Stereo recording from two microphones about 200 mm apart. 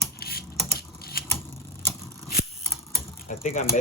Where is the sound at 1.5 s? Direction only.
15° left (ahead or behind).